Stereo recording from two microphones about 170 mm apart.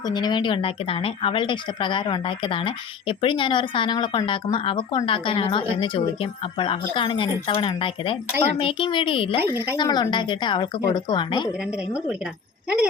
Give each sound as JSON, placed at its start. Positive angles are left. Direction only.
{"t": 0.0, "sound": "a woman's voice", "side_deg": 25}